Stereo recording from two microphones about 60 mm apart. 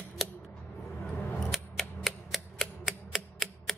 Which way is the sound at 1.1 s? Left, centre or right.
Left.